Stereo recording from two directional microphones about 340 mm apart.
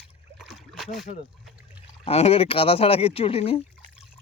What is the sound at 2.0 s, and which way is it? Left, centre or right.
Speech, centre.